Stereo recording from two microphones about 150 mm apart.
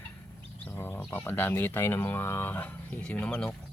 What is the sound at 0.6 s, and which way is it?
Speech, 15° left (ahead or behind).